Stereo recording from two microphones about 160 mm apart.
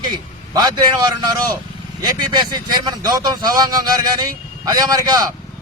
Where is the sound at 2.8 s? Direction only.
25° right (ahead or behind).